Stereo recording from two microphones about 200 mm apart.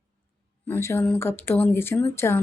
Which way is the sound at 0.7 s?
15° left (ahead or behind).